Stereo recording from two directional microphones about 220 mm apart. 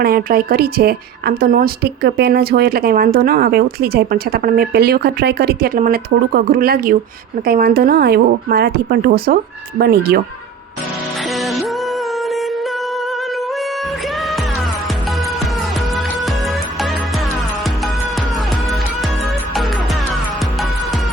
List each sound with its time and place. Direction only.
0.0 s speech: 45° right (ahead or behind)
11.3 s music: centre (ahead or behind)